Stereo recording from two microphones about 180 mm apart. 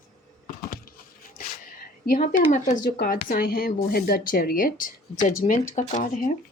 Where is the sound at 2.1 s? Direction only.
50° left (ahead or behind).